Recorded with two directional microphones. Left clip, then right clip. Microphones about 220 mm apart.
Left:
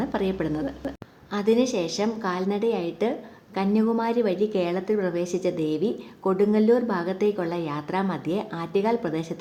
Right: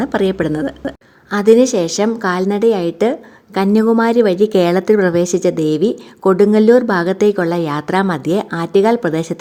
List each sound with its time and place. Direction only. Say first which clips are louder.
0.0 s a woman's voice: right 10 dB; 35° right (ahead or behind)